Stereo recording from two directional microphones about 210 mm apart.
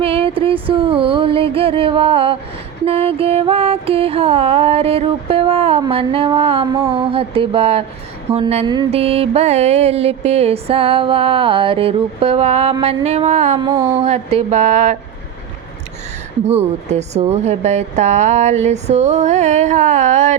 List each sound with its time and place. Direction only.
0.0 s mantra: 25° right (ahead or behind)
12.8 s a woman's voice: 30° right (ahead or behind)
13.6 s a sound: 20° right (ahead or behind)
14.0 s a woman's voice: 30° right (ahead or behind)
16.5 s a woman's voice: 30° right (ahead or behind)